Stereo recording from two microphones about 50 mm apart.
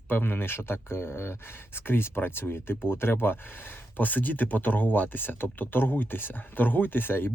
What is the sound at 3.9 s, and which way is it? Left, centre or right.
Speech, left.